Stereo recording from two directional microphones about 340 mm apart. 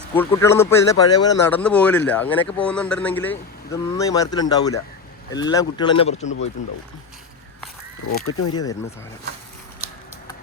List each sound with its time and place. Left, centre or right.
0.1 s a man's voice: centre
8.2 s speech: left
9.8 s a sound: centre